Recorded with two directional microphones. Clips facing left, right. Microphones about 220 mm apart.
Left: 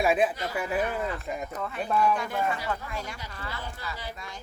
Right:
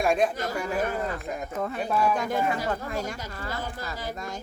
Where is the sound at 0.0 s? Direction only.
5° left (ahead or behind).